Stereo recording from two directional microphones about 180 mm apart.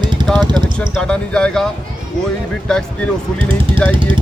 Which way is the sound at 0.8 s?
5° left (ahead or behind).